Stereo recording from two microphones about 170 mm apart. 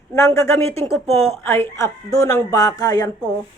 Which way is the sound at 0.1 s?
15° left (ahead or behind).